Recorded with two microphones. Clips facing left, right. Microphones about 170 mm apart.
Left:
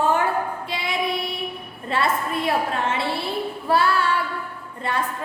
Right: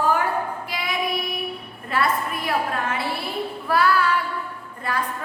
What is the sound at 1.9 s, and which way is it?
A woman's voice, 25° left (ahead or behind).